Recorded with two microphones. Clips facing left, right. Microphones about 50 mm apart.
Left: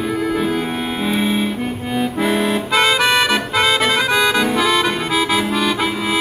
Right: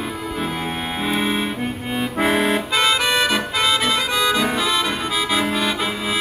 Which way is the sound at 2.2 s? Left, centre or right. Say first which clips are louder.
Right 1 dB; right.